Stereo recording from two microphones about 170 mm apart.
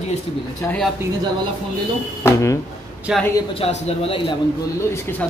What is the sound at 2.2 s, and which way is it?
Speech, 15° left (ahead or behind).